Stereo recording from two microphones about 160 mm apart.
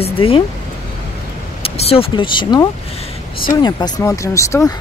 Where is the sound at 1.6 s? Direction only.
35° left (ahead or behind); by 4.7 s 20° left (ahead or behind).